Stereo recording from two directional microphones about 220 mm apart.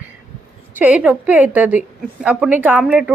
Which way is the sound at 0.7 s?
5° right (ahead or behind).